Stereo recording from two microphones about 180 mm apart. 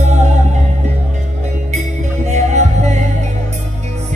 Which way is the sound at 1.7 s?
40° right (ahead or behind).